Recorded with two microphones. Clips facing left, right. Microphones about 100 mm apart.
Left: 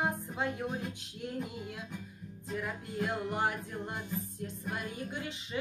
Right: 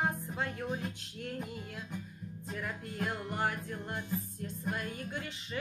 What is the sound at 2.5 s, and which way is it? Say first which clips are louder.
Music: left 3 dB; 15° left (ahead or behind).